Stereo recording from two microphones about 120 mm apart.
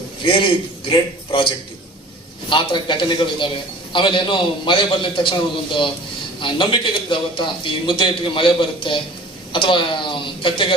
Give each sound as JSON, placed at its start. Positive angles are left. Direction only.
{"t": 0.2, "sound": "a man's voice", "side_deg": 45}
{"t": 6.4, "sound": "a man's voice", "side_deg": 45}